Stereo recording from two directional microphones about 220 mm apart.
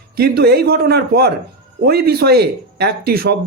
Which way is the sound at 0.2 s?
45° right (ahead or behind).